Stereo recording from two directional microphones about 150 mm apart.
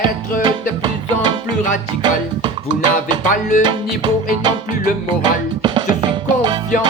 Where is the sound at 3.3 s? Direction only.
55° left (ahead or behind).